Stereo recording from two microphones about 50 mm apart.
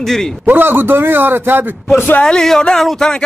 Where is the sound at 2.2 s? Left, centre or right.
Centre.